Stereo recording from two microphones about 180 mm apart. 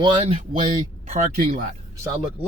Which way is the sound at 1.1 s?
45° right (ahead or behind).